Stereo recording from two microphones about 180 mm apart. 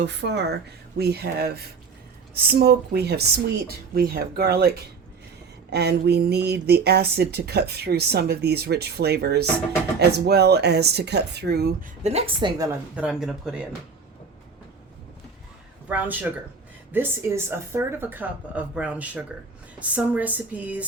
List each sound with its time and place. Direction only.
0.0 s speech: 75° right (ahead or behind)
12.0 s a woman's voice: 35° right (ahead or behind)
13.0 s speech: 5° right (ahead or behind)
15.9 s speech: 10° right (ahead or behind)